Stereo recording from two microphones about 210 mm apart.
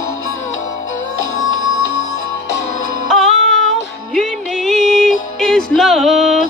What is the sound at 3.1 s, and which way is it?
Music, centre (ahead or behind).